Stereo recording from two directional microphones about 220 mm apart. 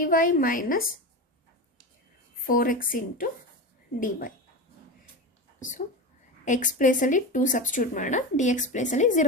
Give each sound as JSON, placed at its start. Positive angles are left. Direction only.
{"t": 0.0, "sound": "speech", "side_deg": 40}
{"t": 2.5, "sound": "speech", "side_deg": 40}
{"t": 5.5, "sound": "speech", "side_deg": 35}